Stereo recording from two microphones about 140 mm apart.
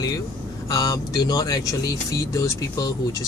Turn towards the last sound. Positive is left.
turn(degrees=25)  # may be behind; listen again after turning